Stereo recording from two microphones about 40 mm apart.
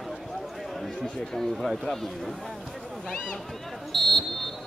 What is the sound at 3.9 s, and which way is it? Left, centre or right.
Buzzer, centre.